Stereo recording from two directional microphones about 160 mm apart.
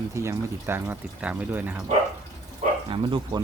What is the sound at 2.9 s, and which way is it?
Speech, 30° right (ahead or behind).